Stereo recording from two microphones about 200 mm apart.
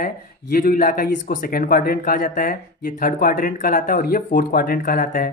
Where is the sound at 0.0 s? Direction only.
45° left (ahead or behind).